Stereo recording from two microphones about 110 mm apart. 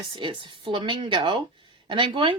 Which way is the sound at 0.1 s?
45° right (ahead or behind).